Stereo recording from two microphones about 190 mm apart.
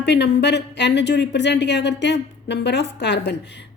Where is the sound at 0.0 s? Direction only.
60° left (ahead or behind).